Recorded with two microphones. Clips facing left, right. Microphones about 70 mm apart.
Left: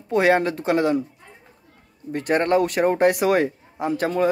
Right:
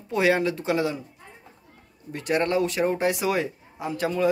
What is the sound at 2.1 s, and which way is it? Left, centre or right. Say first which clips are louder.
Speech: left 4 dB; left.